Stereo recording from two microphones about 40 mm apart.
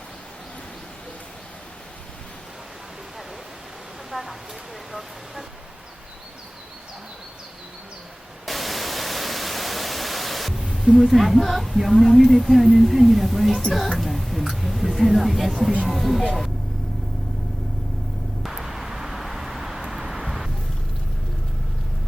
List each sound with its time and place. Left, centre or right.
4.1 s speech: centre
8.4 s white noise: centre
10.6 s a sound: centre
10.9 s speech: centre
18.4 s vehicle: centre